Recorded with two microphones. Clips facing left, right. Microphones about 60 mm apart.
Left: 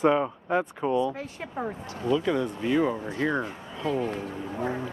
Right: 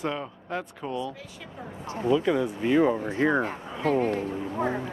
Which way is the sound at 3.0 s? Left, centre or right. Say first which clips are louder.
Right 3 dB; right.